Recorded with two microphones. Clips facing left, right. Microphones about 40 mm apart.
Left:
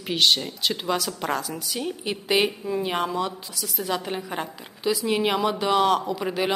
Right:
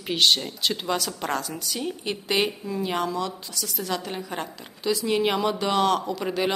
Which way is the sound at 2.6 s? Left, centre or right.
Centre.